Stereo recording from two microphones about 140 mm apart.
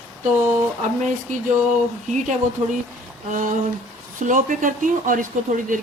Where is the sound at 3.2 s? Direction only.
65° right (ahead or behind).